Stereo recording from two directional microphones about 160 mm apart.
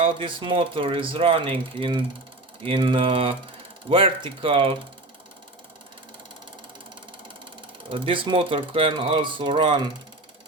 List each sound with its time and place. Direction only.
0.0 s speech: 35° right (ahead or behind)
7.9 s speech: 35° right (ahead or behind)